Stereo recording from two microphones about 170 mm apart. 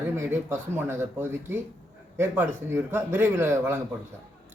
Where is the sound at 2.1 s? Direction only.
10° right (ahead or behind).